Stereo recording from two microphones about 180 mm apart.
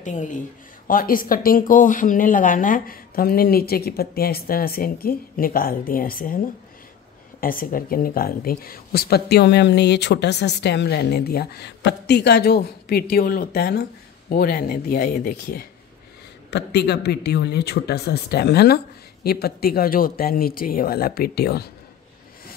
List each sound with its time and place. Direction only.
0.0 s speech: 45° left (ahead or behind)
16.4 s speech: 65° left (ahead or behind)